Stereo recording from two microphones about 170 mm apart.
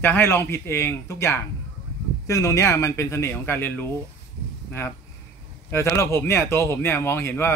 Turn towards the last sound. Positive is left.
turn(degrees=15)  # may be behind; listen again after turning